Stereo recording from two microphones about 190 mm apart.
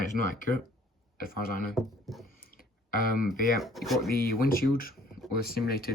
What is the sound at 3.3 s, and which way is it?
Speech, centre (ahead or behind).